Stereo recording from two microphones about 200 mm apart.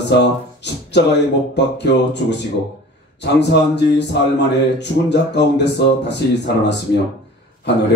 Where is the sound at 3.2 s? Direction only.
55° left (ahead or behind).